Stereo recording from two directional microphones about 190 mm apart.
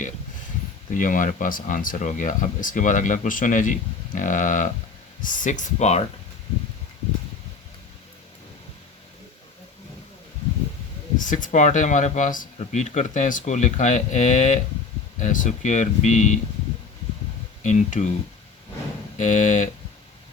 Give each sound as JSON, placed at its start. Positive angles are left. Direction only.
{"t": 0.9, "sound": "speech", "side_deg": 45}
{"t": 11.2, "sound": "speech", "side_deg": 45}
{"t": 17.6, "sound": "speech", "side_deg": 40}
{"t": 19.1, "sound": "speech", "side_deg": 40}